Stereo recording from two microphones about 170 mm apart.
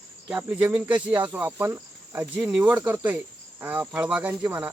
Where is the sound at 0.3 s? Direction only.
10° right (ahead or behind).